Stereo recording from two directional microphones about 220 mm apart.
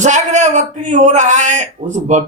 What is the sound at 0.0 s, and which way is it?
Speech, 35° right (ahead or behind).